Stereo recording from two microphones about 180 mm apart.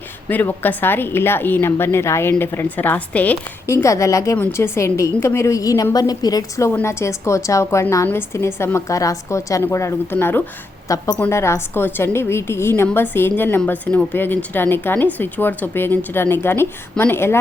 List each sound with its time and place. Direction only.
0.3 s a woman's voice: 10° left (ahead or behind)